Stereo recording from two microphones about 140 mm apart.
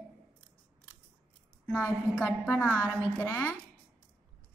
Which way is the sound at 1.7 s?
10° left (ahead or behind).